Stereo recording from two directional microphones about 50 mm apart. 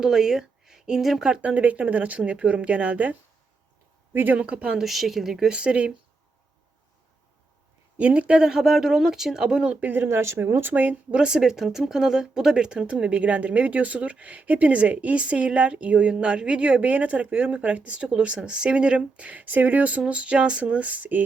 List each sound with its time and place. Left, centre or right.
0.0 s speech: centre
1.4 s speech: right
4.1 s speech: right
4.4 s speech: right
4.8 s speech: centre
5.5 s speech: right
7.9 s speech: right
8.4 s speech: centre
9.6 s speech: right
10.1 s speech: right
11.1 s speech: centre; by 21.2 s right